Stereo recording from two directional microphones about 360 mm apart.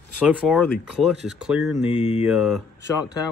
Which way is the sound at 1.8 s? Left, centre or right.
Centre.